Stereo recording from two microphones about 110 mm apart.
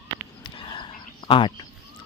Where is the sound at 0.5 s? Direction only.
50° left (ahead or behind).